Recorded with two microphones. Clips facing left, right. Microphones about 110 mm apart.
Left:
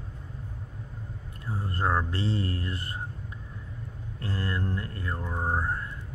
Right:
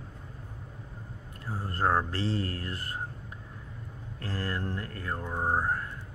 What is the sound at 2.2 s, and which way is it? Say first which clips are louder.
Speech: left 1 dB; 25° left (ahead or behind).